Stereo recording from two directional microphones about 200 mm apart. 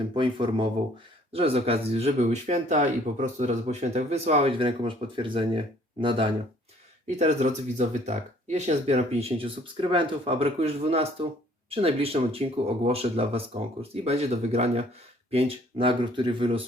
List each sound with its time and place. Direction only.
0.1 s speech: 25° right (ahead or behind)
7.2 s speech: 35° right (ahead or behind)